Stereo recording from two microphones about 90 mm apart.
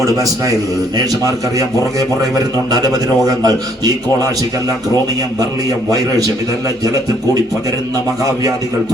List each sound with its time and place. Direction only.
0.0 s a man's voice: 40° right (ahead or behind)